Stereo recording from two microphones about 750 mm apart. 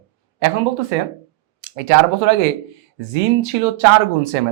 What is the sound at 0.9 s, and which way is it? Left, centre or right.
Speech, right.